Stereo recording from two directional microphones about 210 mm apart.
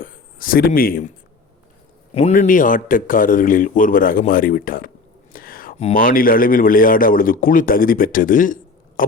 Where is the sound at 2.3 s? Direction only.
40° left (ahead or behind).